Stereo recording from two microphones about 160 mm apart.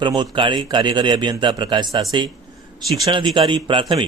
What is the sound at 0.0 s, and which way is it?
A man's voice, 30° right (ahead or behind).